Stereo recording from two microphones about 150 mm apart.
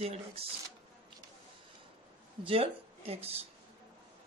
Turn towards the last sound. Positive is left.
turn(degrees=-40)  # may be behind; listen again after turning